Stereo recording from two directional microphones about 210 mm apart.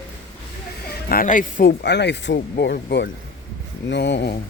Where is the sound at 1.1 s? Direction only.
40° left (ahead or behind).